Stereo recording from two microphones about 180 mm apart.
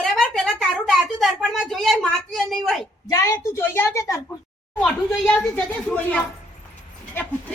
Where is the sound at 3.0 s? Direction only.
15° left (ahead or behind).